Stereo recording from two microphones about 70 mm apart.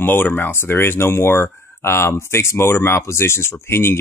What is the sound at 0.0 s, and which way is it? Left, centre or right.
Speech, left.